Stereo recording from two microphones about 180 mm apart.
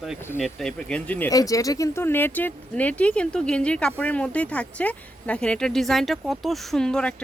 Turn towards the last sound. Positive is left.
turn(degrees=5)  # may be behind; listen again after turning